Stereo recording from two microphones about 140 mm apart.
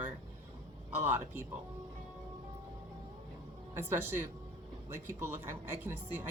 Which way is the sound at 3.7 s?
15° right (ahead or behind).